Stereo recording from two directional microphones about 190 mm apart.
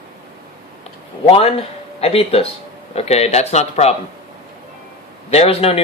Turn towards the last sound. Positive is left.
turn(degrees=30)  # may be behind; listen again after turning